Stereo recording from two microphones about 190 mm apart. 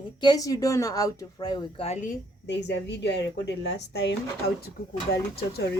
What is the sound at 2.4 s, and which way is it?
A woman's voice, 65° left (ahead or behind).